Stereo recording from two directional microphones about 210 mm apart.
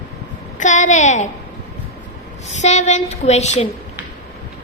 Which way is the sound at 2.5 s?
35° left (ahead or behind).